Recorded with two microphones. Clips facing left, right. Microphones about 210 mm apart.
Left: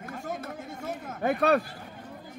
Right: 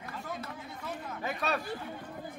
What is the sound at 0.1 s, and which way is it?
Chatter, 50° left (ahead or behind).